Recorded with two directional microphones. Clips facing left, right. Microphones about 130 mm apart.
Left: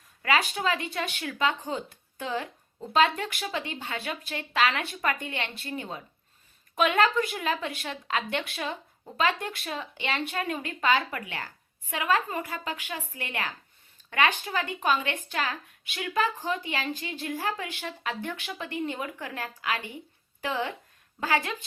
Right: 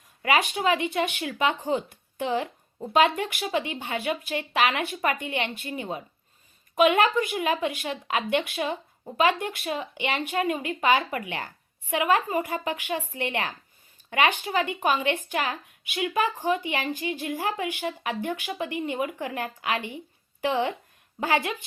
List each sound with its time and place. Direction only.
0.2 s a woman's voice: 20° right (ahead or behind)